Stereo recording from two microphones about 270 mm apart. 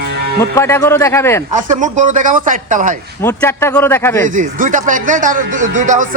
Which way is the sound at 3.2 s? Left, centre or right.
Centre.